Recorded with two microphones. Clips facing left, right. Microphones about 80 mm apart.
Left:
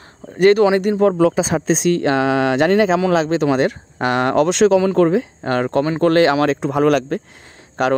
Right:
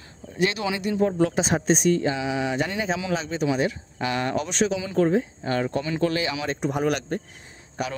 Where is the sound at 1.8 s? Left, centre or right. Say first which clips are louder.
Left 7 dB; left.